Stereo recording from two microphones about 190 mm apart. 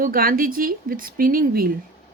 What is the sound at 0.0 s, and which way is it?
A woman's voice, 50° right (ahead or behind).